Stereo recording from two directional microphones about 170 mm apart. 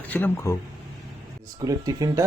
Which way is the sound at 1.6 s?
20° right (ahead or behind).